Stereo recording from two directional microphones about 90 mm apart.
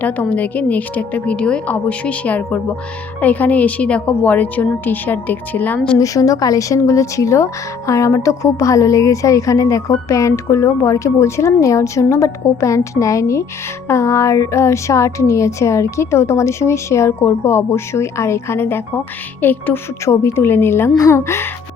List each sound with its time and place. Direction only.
0.0 s a woman's voice: 15° left (ahead or behind)
6.0 s a woman's voice: 40° left (ahead or behind)